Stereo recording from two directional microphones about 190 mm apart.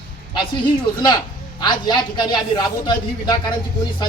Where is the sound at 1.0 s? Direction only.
25° left (ahead or behind).